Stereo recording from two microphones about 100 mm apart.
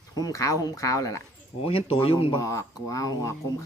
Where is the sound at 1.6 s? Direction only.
70° left (ahead or behind).